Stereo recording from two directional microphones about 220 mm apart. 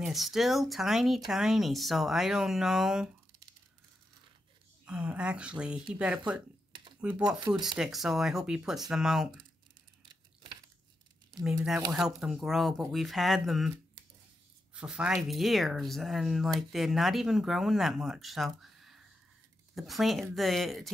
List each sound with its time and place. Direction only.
0.0 s speech: centre (ahead or behind)
4.8 s speech: 5° right (ahead or behind)
7.3 s speech: 20° right (ahead or behind)
7.6 s speech: centre (ahead or behind)
10.0 s tearing: 20° right (ahead or behind)
11.9 s speech: 5° right (ahead or behind)